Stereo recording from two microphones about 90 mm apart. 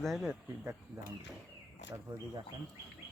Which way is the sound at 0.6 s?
30° right (ahead or behind).